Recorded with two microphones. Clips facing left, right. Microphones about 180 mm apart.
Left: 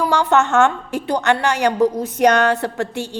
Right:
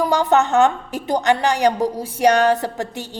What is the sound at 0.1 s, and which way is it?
A woman's voice, 15° right (ahead or behind).